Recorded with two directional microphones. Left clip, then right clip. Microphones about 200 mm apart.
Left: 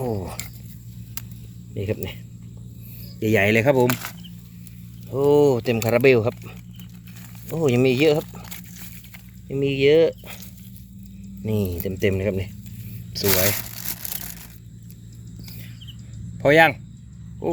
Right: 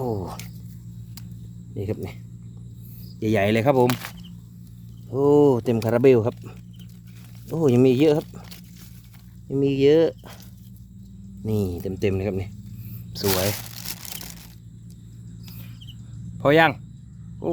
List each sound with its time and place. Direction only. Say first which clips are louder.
0.0 s a sound: left 1 dB; 5° right (ahead or behind)
1.7 s speech: left 2 dB; centre (ahead or behind)
3.2 s speech: left 3 dB; centre (ahead or behind)
9.5 s speech: even; 15° right (ahead or behind)
11.4 s speech: left 1 dB; 10° right (ahead or behind)
13.2 s speech: left 2 dB; 15° right (ahead or behind)
16.4 s speech: left 2 dB; 10° right (ahead or behind)